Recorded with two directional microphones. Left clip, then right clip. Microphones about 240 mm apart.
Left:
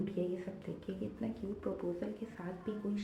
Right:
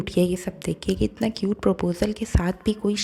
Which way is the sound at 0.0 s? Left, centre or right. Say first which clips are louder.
Right 14 dB; right.